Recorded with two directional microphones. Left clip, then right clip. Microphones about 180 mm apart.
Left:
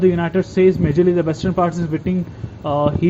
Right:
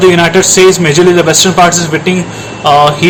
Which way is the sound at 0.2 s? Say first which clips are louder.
Right 11 dB; 30° left (ahead or behind).